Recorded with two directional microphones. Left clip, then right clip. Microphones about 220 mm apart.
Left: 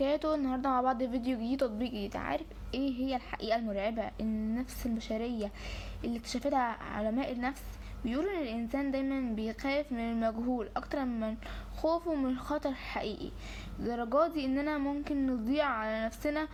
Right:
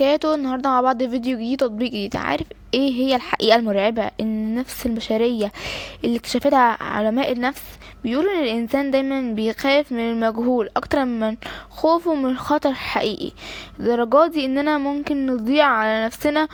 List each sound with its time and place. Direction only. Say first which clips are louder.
0.0 s a woman's voice: right 12 dB; 35° right (ahead or behind)